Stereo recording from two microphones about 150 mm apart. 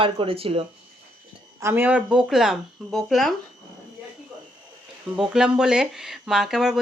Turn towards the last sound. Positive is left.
turn(degrees=0)  # may be behind; listen again after turning